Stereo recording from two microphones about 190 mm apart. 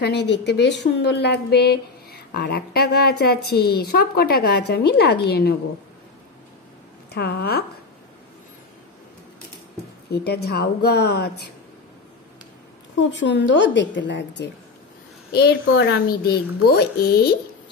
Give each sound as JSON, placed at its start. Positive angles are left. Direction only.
{"t": 0.0, "sound": "speech", "side_deg": 65}
{"t": 7.1, "sound": "speech", "side_deg": 60}
{"t": 10.1, "sound": "speech", "side_deg": 55}
{"t": 13.1, "sound": "a woman's voice", "side_deg": 70}
{"t": 16.1, "sound": "speech", "side_deg": 55}